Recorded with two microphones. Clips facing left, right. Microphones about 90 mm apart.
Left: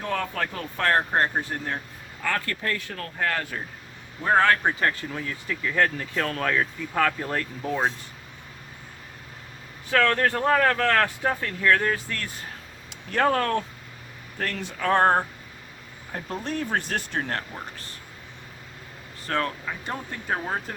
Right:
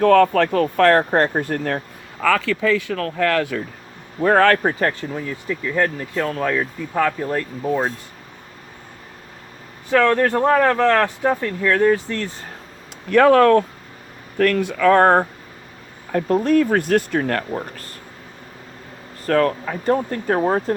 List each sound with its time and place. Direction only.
0.0 s speech: 75° right (ahead or behind)
1.5 s a man's voice: 70° right (ahead or behind)
2.2 s speech: 90° right
4.2 s a man's voice: 65° right (ahead or behind)
4.5 s speech: 35° right (ahead or behind)
5.1 s speech: 15° right (ahead or behind)
9.9 s speech: 15° right (ahead or behind)
13.1 s speech: 60° right (ahead or behind)
16.3 s speech: 50° right (ahead or behind)
19.2 s speech: 45° right (ahead or behind)
20.5 s speech: 35° right (ahead or behind)